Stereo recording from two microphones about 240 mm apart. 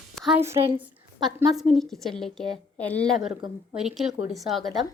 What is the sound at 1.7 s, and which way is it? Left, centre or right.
A woman's voice, centre.